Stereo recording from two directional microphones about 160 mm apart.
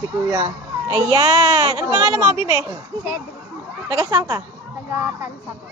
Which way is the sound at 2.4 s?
30° left (ahead or behind).